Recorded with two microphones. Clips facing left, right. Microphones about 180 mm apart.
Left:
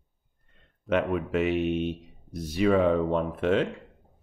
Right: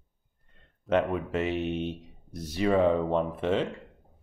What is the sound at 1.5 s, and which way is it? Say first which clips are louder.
Speech: left 4 dB; 15° left (ahead or behind).